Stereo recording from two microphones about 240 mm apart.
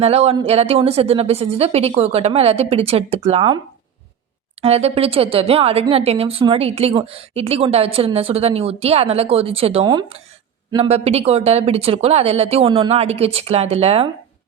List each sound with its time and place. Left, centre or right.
0.0 s a woman's voice: right
4.6 s a woman's voice: right